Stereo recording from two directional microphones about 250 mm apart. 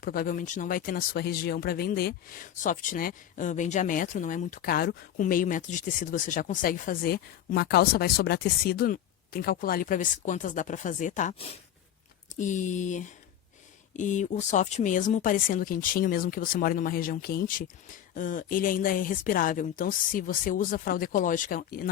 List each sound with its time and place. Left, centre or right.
0.0 s speech: left